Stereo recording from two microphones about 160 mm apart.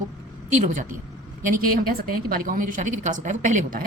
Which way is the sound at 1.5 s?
65° right (ahead or behind).